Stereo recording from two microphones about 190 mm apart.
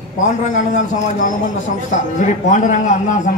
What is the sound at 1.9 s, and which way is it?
A man's voice, 40° left (ahead or behind).